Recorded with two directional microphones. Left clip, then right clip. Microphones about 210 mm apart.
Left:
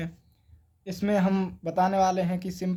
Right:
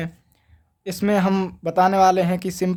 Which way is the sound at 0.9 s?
30° right (ahead or behind).